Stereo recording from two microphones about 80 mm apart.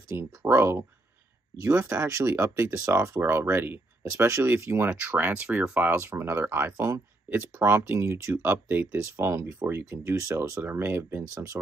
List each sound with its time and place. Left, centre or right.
0.1 s speech: right
4.6 s speech: right
5.9 s speech: right
10.6 s speech: right
11.3 s speech: right